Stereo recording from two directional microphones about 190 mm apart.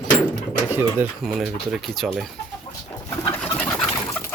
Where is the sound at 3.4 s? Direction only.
5° left (ahead or behind).